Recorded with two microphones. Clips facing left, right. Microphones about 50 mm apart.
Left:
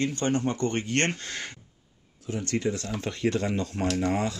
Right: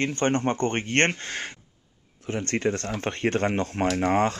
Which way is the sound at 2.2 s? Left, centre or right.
Right.